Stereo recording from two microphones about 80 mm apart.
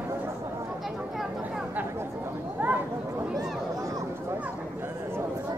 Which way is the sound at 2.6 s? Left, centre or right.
Right.